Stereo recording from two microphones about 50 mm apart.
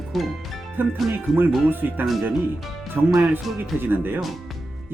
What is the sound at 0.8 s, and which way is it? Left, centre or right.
Speech, right.